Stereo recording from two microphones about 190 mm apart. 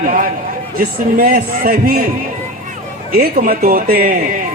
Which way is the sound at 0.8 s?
50° right (ahead or behind).